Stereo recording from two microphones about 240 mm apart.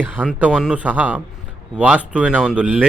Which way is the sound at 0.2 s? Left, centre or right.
Centre.